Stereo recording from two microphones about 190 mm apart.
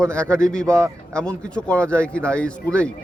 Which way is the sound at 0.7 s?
15° right (ahead or behind).